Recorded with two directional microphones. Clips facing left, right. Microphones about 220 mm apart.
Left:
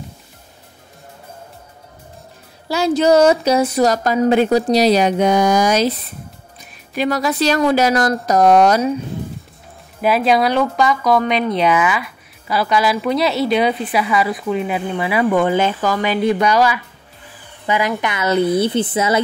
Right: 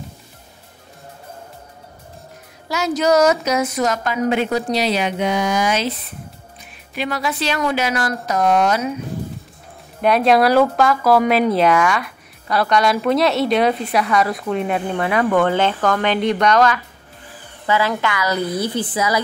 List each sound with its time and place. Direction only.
2.7 s a woman's voice: 30° left (ahead or behind)
10.0 s a woman's voice: centre (ahead or behind); by 19.2 s 25° left (ahead or behind)